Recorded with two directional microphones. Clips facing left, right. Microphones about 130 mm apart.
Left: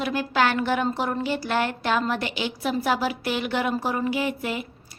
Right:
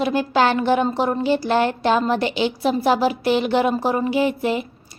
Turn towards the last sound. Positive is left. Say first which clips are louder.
# right 7 dB
turn(degrees=-25)  # may be behind; listen again after turning